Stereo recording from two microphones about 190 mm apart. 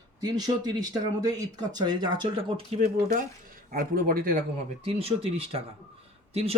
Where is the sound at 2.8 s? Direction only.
45° right (ahead or behind).